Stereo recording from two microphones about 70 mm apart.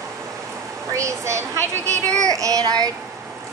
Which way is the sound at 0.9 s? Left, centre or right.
Right.